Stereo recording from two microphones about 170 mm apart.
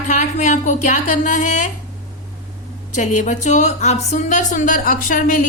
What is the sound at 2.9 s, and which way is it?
A woman's voice, 45° left (ahead or behind).